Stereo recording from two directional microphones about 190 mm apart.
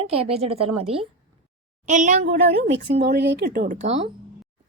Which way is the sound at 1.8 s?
40° right (ahead or behind).